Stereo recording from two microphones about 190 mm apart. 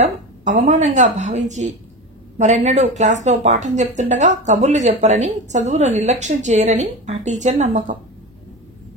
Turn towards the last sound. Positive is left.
turn(degrees=-40)  # may be behind; listen again after turning